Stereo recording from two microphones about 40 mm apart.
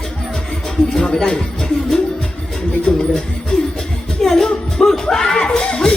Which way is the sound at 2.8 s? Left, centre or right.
Left.